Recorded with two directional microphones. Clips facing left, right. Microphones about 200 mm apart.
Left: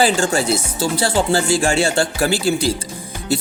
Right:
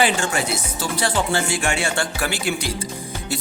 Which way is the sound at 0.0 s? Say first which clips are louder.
Left 4 dB; 30° left (ahead or behind).